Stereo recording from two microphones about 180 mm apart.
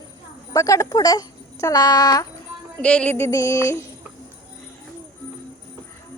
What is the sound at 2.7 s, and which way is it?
Music, 5° left (ahead or behind).